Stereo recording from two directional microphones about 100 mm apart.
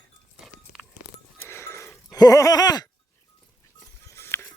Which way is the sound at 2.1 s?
35° left (ahead or behind).